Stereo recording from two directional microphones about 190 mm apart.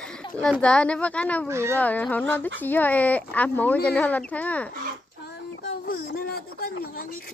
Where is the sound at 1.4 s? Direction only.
15° right (ahead or behind).